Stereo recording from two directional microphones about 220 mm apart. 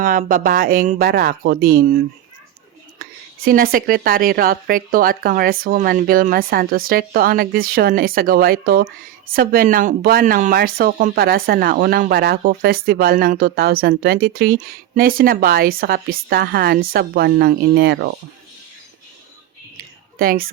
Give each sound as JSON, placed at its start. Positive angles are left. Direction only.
{"t": 0.0, "sound": "a woman's voice", "side_deg": -40}
{"t": 3.0, "sound": "a woman's voice", "side_deg": -40}
{"t": 20.1, "sound": "a woman's voice", "side_deg": -40}